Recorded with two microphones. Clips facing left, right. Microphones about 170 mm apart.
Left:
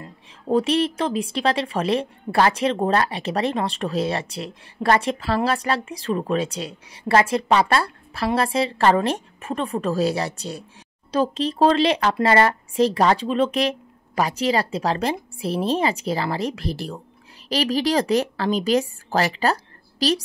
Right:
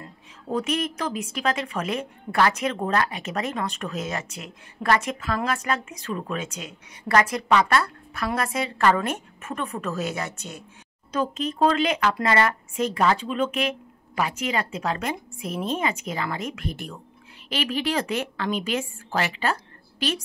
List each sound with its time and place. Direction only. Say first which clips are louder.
0.0 s a woman's voice: left 4 dB; 30° left (ahead or behind)